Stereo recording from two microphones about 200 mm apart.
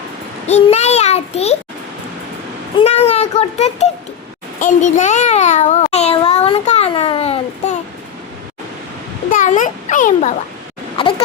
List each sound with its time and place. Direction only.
0.4 s child singing: 35° left (ahead or behind)
2.7 s a child's voice: 30° left (ahead or behind)
4.6 s child singing: 40° left (ahead or behind)
9.3 s a child's voice: 40° left (ahead or behind)